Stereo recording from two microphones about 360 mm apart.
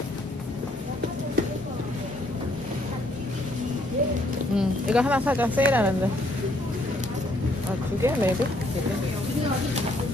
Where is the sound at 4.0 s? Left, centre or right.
Right.